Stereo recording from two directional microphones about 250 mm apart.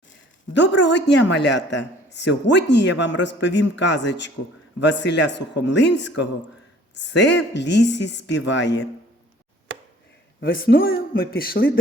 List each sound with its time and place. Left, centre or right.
0.5 s speech: left
10.4 s speech: left